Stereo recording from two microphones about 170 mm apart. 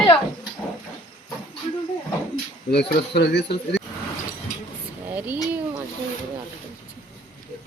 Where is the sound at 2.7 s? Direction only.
70° left (ahead or behind).